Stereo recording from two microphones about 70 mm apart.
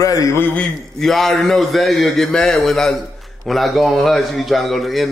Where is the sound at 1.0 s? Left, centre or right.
Centre.